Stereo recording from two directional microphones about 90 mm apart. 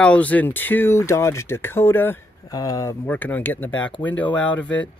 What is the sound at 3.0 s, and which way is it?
Speech, 20° left (ahead or behind).